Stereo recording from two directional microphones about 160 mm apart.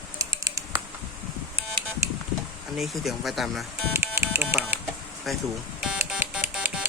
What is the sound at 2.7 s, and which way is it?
Speech, centre (ahead or behind).